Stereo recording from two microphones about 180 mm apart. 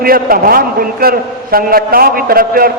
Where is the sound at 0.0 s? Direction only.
55° right (ahead or behind).